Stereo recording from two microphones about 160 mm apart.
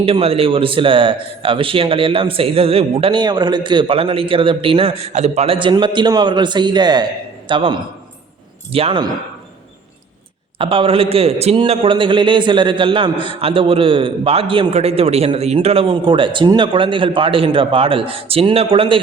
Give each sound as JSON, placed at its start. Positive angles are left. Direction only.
{"t": 0.0, "sound": "a man's voice", "side_deg": -35}
{"t": 10.6, "sound": "a man's voice", "side_deg": -35}